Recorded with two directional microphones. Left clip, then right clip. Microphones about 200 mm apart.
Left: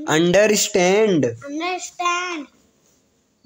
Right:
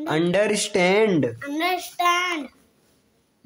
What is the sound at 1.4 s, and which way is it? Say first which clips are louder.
A child's voice: right 1 dB; 50° right (ahead or behind).